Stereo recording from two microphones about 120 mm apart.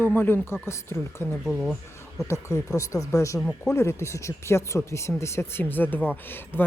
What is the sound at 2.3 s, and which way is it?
Speech, 25° left (ahead or behind).